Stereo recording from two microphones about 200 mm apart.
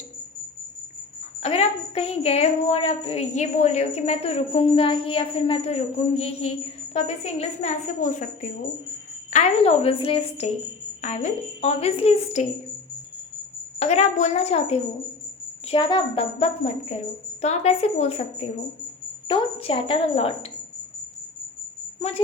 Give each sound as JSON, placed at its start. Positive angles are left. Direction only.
{"t": 1.4, "sound": "speech", "side_deg": 30}
{"t": 13.7, "sound": "a woman's voice", "side_deg": 35}